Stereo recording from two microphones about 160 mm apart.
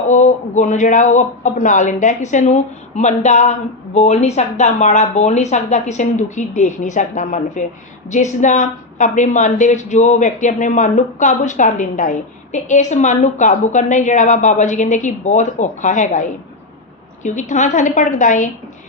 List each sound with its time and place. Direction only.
0.1 s a woman's voice: 45° left (ahead or behind)